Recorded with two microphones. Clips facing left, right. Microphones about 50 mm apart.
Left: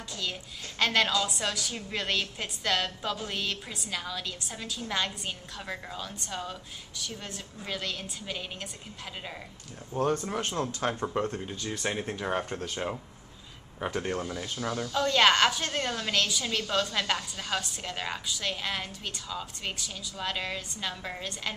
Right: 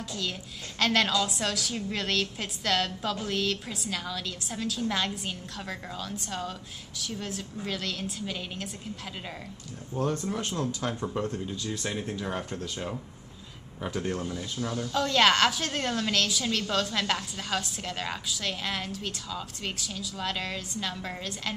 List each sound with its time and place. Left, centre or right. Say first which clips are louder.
0.1 s a woman's voice: left 1 dB; centre
10.0 s speech: left 1 dB; left
13.7 s speech: even; left
14.1 s speech: even; centre
14.9 s a woman's voice: even; centre